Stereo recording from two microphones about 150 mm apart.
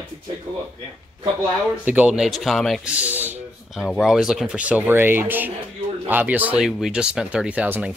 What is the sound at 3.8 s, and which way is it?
Speech, centre (ahead or behind).